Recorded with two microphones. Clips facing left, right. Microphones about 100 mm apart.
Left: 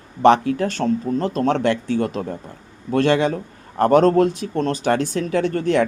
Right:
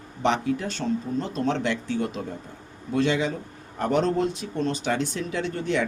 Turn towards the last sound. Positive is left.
turn(degrees=50)  # may be behind; listen again after turning